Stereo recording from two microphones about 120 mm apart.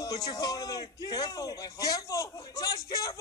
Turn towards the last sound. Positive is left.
turn(degrees=30)  # may be behind; listen again after turning